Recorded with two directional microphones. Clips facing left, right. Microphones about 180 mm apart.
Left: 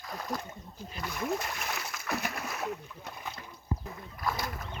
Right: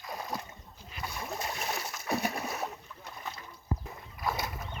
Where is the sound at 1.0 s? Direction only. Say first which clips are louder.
Left 4 dB; 30° right (ahead or behind).